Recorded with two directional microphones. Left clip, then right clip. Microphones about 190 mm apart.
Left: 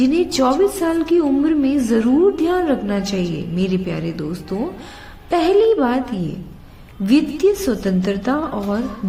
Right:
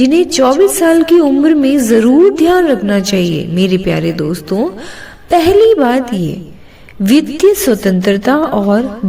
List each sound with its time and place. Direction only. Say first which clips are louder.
0.0 s a woman's voice: right 7 dB; 35° right (ahead or behind)